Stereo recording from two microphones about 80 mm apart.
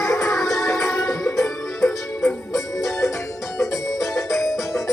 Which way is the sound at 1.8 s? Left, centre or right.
Left.